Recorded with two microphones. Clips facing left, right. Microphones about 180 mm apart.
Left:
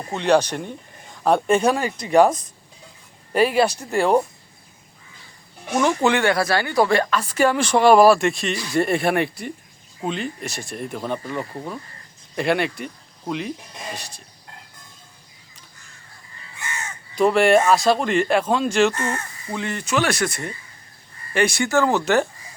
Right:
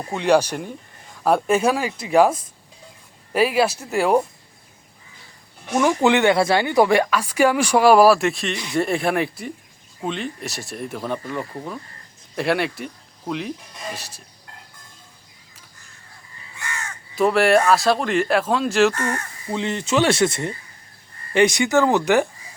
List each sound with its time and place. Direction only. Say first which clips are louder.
0.1 s speech: even; 10° right (ahead or behind)
5.8 s speech: right 2 dB; 15° right (ahead or behind)
17.2 s speech: left 1 dB; centre (ahead or behind)
18.9 s speech: right 1 dB; 25° left (ahead or behind)
19.5 s speech: right 3 dB; 20° right (ahead or behind)